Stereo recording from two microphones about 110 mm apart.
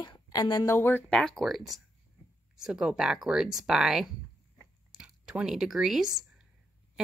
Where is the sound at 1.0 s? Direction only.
5° left (ahead or behind).